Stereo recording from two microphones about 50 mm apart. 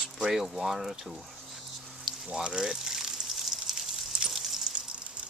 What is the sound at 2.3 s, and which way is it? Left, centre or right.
Speech, centre.